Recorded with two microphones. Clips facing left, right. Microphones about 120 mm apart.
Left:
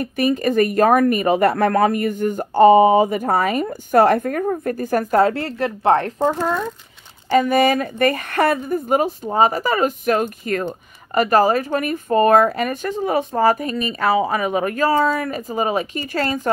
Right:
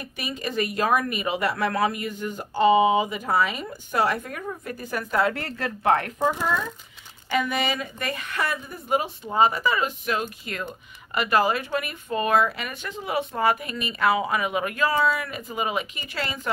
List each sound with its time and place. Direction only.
0.0 s speech: 50° left (ahead or behind); by 6.1 s 30° left (ahead or behind)
7.2 s speech: 40° left (ahead or behind)